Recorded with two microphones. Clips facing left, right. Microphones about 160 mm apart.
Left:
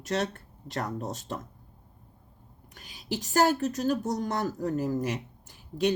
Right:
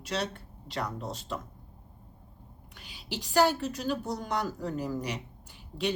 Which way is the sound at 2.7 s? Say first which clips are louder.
Left 5 dB; 45° left (ahead or behind).